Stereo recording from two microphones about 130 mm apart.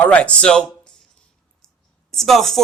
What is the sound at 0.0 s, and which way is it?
Speech, 10° left (ahead or behind).